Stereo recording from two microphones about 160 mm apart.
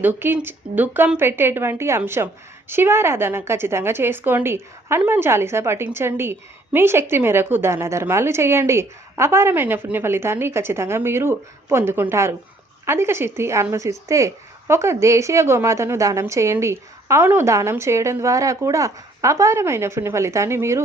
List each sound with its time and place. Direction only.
0.0 s a woman's voice: 10° right (ahead or behind)